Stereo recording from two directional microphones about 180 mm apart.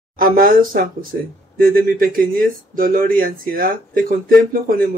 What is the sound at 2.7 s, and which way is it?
Speech, 50° right (ahead or behind).